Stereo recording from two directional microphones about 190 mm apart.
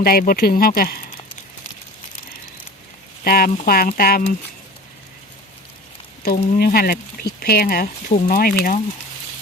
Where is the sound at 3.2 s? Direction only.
50° left (ahead or behind).